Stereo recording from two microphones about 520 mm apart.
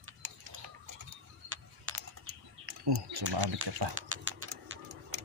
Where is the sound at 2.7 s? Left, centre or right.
Right.